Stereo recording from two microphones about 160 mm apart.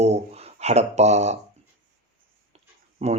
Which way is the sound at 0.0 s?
40° right (ahead or behind).